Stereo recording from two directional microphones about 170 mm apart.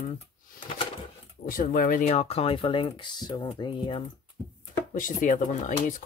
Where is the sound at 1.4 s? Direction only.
55° left (ahead or behind); by 4.0 s 30° left (ahead or behind).